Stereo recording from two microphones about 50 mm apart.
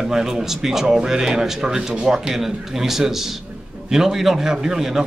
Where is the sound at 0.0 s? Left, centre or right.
Centre.